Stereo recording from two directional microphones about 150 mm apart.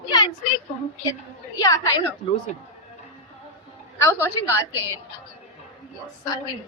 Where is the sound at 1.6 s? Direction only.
25° left (ahead or behind).